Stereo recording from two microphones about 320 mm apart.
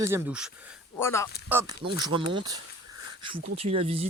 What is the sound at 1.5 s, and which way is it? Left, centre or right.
Speech, centre.